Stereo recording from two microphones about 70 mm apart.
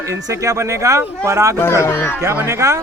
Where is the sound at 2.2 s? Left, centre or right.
Right.